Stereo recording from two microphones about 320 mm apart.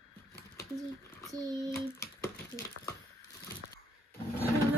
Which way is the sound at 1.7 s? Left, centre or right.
Centre.